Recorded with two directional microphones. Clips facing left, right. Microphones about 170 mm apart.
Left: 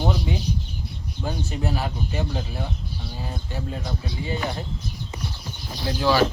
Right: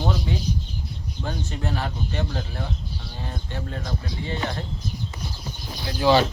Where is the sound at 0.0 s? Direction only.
10° left (ahead or behind).